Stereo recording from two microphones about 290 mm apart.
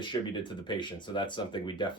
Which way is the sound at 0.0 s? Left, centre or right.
Centre.